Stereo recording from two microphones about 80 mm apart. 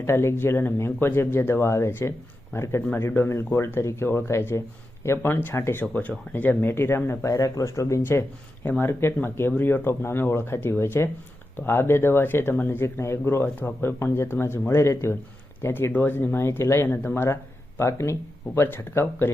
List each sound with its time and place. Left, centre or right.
0.0 s speech: left
5.8 s speech: centre